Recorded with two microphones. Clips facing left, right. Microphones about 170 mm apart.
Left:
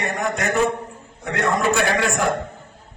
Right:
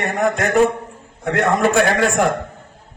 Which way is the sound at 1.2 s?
55° right (ahead or behind).